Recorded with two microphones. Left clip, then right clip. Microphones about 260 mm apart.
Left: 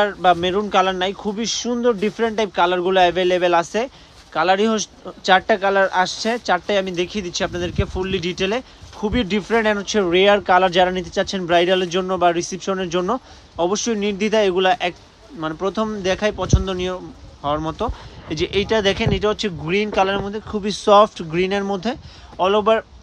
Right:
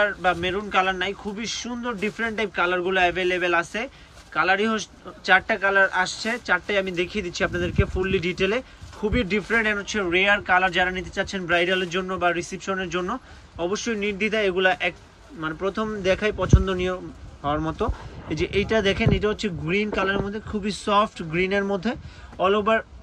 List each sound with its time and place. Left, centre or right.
0.0 s speech: centre